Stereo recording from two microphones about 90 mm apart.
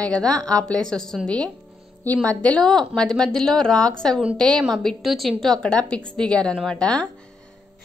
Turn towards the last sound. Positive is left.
turn(degrees=10)  # may be behind; listen again after turning